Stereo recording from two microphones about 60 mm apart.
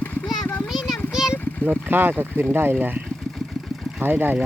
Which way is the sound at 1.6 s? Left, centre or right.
Right.